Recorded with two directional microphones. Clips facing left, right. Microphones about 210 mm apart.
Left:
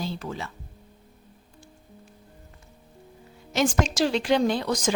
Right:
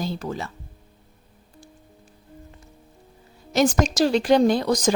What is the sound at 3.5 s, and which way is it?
Speech, 40° right (ahead or behind).